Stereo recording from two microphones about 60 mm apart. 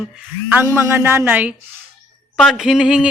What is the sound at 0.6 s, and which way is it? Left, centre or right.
Speech, right.